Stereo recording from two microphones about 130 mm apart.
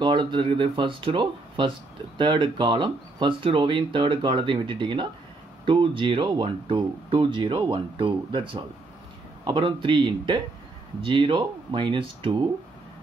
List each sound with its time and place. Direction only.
0.0 s speech: 35° right (ahead or behind)